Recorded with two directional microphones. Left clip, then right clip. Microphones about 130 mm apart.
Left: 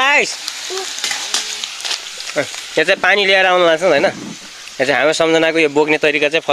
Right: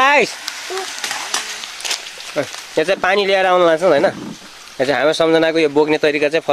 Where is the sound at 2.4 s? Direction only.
5° left (ahead or behind).